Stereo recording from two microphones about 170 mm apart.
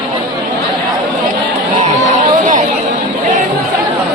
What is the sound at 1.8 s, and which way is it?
Chatter, 45° right (ahead or behind).